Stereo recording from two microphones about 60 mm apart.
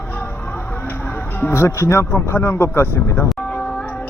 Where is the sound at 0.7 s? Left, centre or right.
Left.